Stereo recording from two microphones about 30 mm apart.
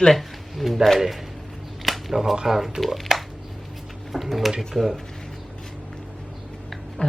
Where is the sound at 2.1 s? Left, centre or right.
Centre.